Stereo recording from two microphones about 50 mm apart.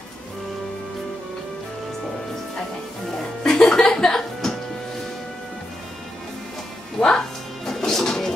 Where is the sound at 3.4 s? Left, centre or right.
Centre.